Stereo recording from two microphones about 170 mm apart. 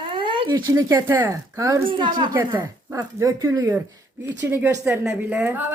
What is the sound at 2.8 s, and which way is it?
Speech, 15° right (ahead or behind).